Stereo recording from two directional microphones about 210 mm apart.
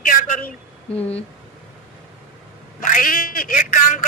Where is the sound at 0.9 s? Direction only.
30° left (ahead or behind).